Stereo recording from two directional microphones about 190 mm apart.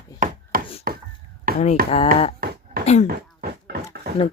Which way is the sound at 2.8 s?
35° left (ahead or behind).